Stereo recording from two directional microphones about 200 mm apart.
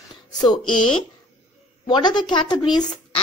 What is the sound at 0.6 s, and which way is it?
Speech, 90° left.